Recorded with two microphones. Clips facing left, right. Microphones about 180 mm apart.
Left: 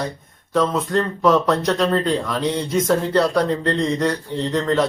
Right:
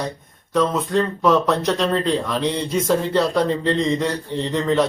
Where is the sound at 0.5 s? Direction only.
Centre (ahead or behind).